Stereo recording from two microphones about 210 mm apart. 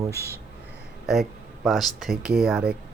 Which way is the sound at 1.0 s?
Centre (ahead or behind).